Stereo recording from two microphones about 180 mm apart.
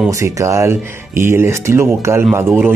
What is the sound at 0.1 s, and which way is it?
Speech, 15° right (ahead or behind).